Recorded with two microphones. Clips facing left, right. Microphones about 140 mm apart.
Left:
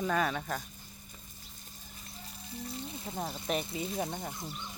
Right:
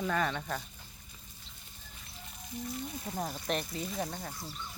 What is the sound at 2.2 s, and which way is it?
Speech, 30° left (ahead or behind).